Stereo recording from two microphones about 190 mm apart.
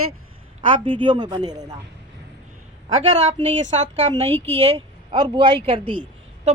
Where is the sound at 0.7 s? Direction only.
25° right (ahead or behind).